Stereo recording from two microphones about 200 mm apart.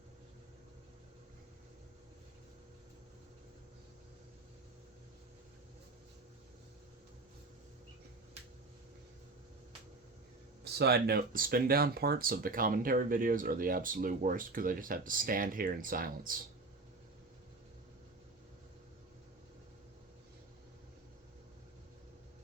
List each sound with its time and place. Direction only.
10.6 s speech: 55° right (ahead or behind)